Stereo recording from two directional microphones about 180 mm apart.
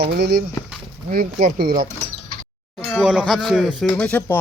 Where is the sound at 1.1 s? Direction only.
50° right (ahead or behind).